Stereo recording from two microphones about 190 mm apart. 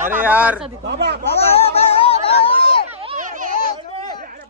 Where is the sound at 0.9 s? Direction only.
60° right (ahead or behind).